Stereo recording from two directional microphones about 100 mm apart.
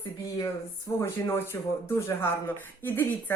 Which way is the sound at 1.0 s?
25° left (ahead or behind).